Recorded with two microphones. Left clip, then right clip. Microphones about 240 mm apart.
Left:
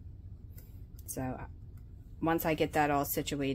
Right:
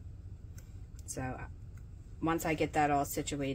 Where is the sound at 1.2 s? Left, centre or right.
Left.